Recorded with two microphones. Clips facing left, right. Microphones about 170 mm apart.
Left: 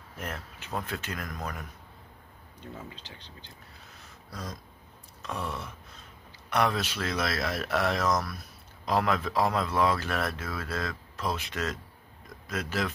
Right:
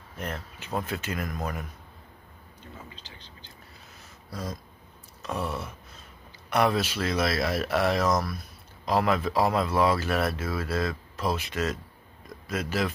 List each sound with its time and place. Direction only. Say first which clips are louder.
0.2 s speech: right 3 dB; centre (ahead or behind)
4.3 s a sound: right 4 dB; 5° right (ahead or behind)
5.2 s speech: right 4 dB; 5° right (ahead or behind)